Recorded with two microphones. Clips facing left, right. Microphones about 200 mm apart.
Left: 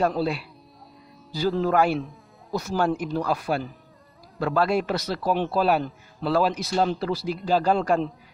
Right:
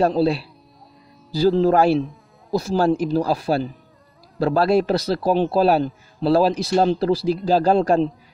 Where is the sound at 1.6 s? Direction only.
30° right (ahead or behind).